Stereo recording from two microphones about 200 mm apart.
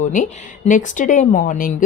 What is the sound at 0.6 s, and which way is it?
Speech, 40° left (ahead or behind).